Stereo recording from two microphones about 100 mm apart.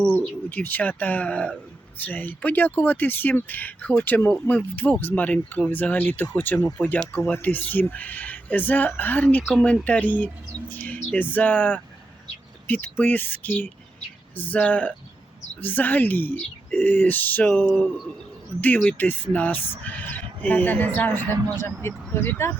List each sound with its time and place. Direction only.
0.2 s speech: 15° left (ahead or behind)